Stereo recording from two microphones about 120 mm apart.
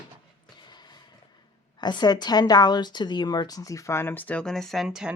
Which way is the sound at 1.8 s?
35° left (ahead or behind).